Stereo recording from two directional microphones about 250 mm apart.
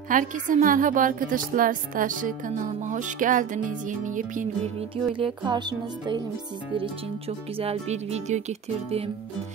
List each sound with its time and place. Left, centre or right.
0.1 s speech: right